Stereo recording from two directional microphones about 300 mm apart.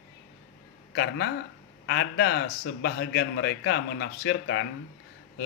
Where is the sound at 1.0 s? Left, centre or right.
Left.